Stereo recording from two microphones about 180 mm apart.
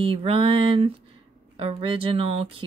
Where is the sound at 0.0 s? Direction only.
30° right (ahead or behind).